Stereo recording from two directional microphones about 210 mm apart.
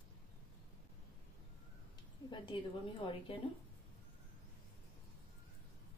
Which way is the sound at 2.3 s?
25° left (ahead or behind).